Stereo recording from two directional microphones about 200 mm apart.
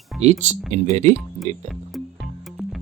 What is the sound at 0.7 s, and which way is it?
Speech, 35° right (ahead or behind).